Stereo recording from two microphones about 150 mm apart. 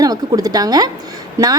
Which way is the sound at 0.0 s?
25° right (ahead or behind).